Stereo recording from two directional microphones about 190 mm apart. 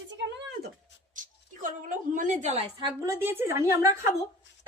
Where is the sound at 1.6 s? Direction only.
45° right (ahead or behind).